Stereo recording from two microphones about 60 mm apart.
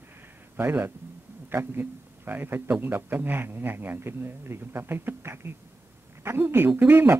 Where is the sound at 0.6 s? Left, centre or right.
Right.